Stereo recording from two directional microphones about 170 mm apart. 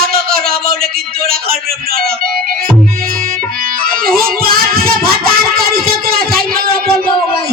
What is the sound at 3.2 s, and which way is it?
Music, 55° right (ahead or behind).